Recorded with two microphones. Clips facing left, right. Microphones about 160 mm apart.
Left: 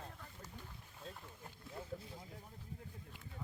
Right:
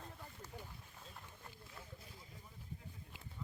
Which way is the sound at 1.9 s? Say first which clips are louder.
Left 10 dB; 65° left (ahead or behind).